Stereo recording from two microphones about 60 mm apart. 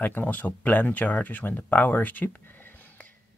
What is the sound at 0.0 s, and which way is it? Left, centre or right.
Speech, left.